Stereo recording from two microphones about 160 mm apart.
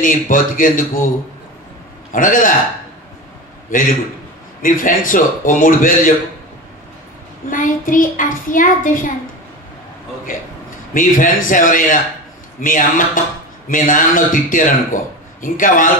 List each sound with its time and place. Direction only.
0.0 s a child's voice: 60° left (ahead or behind)
2.1 s a child's voice: 55° left (ahead or behind)
3.7 s a child's voice: 60° left (ahead or behind)
7.4 s a child's voice: 55° left (ahead or behind)
10.9 s a child's voice: 55° left (ahead or behind)